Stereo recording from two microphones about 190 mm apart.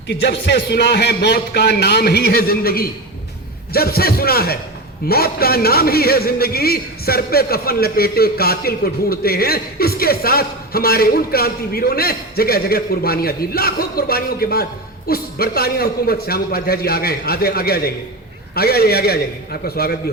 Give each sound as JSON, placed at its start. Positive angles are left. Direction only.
{"t": 0.1, "sound": "a man's voice", "side_deg": 65}